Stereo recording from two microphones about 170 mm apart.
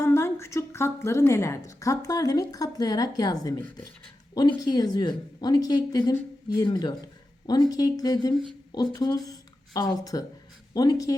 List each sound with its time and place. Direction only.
0.0 s a woman's voice: 15° left (ahead or behind)